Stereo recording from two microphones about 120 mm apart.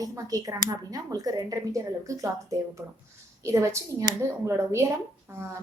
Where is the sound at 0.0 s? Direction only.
30° right (ahead or behind).